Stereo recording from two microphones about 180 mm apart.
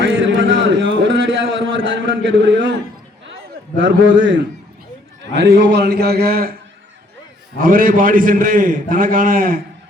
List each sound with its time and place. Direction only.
0.0 s a sound: 90° right
3.8 s a man's voice: 90° right
5.2 s a man's voice: 75° right (ahead or behind); by 6.5 s 55° right (ahead or behind)
7.6 s a man's voice: 50° right (ahead or behind)